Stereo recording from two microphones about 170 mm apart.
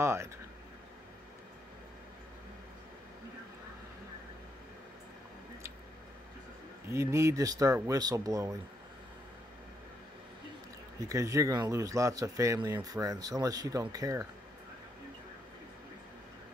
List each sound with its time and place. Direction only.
0.0 s speech: 15° right (ahead or behind)
6.9 s speech: 15° right (ahead or behind)
11.1 s speech: 20° right (ahead or behind)